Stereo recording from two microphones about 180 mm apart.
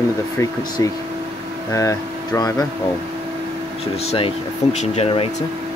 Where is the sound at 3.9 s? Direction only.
35° left (ahead or behind).